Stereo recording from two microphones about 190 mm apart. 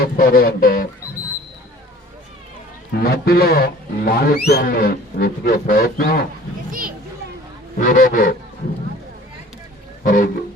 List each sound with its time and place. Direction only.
0.0 s speech: 50° left (ahead or behind)
3.0 s speech: 55° left (ahead or behind)
6.7 s a sound: 50° right (ahead or behind)
7.8 s speech: 50° left (ahead or behind)
10.0 s music: 45° left (ahead or behind)